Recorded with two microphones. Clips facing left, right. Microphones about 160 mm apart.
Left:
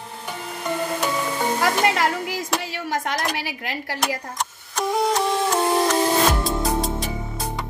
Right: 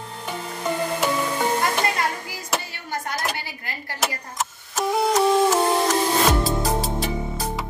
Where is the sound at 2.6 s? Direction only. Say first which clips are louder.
Left 5 dB; 90° left.